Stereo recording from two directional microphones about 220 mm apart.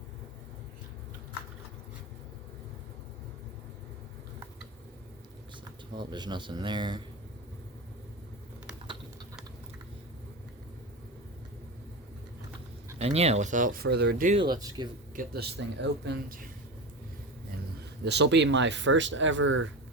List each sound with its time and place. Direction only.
5.9 s speech: 20° right (ahead or behind)
13.0 s speech: 30° right (ahead or behind); by 14.3 s 45° right (ahead or behind)
14.3 s speech: 20° right (ahead or behind)
15.1 s speech: 40° right (ahead or behind)
18.0 s speech: 50° right (ahead or behind)